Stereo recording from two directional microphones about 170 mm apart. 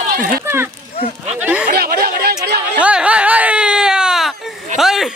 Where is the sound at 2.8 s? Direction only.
5° right (ahead or behind).